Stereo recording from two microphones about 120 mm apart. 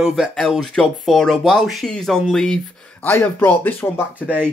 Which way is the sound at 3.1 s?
15° left (ahead or behind).